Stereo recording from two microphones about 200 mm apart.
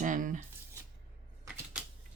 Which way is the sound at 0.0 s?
40° right (ahead or behind).